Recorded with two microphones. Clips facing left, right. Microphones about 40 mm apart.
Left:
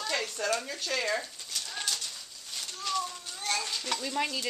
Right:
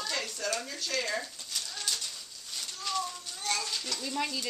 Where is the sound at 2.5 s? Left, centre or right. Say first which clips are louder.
Left 1 dB; centre.